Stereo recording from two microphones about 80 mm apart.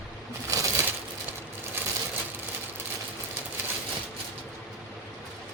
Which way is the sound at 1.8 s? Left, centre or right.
Right.